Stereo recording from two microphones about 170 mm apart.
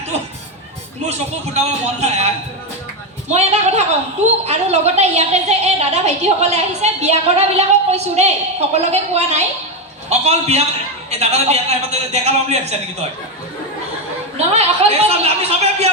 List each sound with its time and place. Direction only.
1.5 s a woman's voice: 40° right (ahead or behind)
14.3 s a woman's voice: 40° right (ahead or behind)